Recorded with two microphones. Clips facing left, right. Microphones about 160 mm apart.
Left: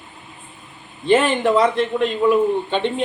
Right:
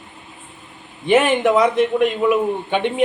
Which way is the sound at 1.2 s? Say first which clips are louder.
Right 1 dB; 15° right (ahead or behind).